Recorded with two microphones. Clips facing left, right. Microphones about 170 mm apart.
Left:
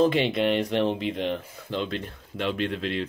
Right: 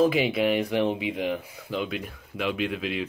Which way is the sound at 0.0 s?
5° right (ahead or behind).